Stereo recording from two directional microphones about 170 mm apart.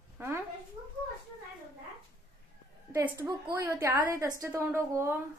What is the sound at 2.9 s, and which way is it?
Speech, 15° right (ahead or behind).